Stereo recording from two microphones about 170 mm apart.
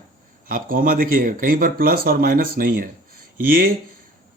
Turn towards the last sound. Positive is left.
turn(degrees=-60)  # may be behind; listen again after turning